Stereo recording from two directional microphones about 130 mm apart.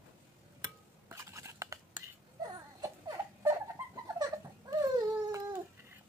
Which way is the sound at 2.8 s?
30° right (ahead or behind).